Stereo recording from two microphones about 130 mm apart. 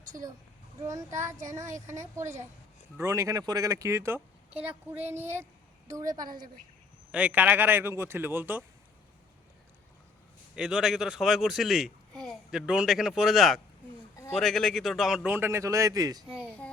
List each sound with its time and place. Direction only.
0.9 s a man's voice: 25° right (ahead or behind)
6.1 s a woman's voice: 90° right
7.1 s a man's voice: 10° right (ahead or behind)
10.5 s a child's voice: 5° right (ahead or behind); by 16.2 s 30° right (ahead or behind)